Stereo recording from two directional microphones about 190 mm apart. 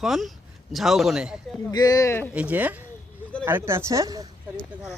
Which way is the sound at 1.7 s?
20° left (ahead or behind).